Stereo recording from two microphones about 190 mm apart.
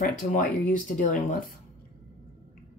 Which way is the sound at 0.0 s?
45° left (ahead or behind).